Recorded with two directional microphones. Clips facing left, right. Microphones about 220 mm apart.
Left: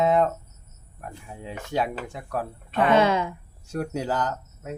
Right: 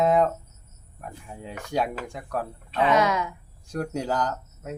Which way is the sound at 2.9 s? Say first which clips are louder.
Left 3 dB; 30° left (ahead or behind).